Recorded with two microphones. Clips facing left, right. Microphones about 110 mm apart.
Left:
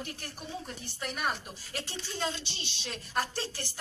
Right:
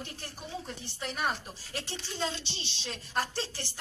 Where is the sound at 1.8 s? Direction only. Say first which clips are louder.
Even; 25° right (ahead or behind).